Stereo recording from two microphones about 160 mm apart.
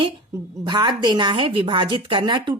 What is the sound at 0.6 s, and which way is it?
Speech, 25° right (ahead or behind).